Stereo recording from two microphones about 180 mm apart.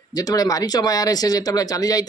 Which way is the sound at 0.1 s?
20° left (ahead or behind).